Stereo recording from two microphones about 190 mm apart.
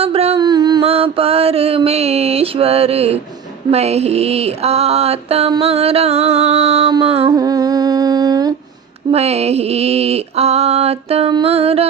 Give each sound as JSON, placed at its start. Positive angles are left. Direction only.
{"t": 0.0, "sound": "mantra", "side_deg": -30}
{"t": 0.4, "sound": "mantra", "side_deg": -20}
{"t": 7.3, "sound": "humming", "side_deg": -20}
{"t": 9.1, "sound": "mantra", "side_deg": -35}